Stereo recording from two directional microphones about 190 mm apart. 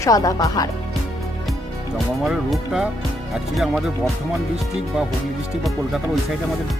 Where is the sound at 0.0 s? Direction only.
20° left (ahead or behind).